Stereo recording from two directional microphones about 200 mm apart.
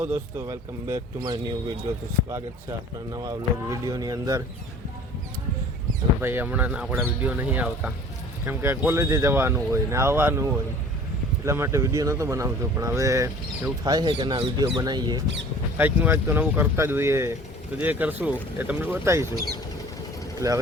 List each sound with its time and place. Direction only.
0.0 s speech: 10° right (ahead or behind)
6.2 s speech: 10° right (ahead or behind)
20.4 s speech: 15° right (ahead or behind)